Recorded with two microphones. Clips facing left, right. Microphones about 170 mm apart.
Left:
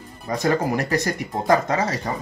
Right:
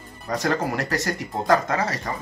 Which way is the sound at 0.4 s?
15° left (ahead or behind).